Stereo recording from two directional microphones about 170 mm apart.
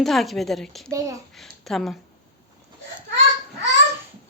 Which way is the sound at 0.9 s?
20° right (ahead or behind).